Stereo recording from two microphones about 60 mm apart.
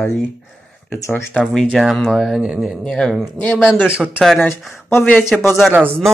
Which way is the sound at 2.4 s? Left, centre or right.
Centre.